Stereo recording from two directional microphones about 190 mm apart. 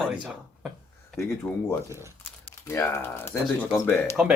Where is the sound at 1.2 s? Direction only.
15° left (ahead or behind).